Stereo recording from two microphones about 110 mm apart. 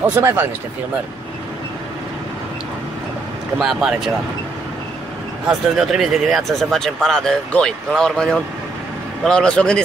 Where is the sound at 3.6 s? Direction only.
5° right (ahead or behind).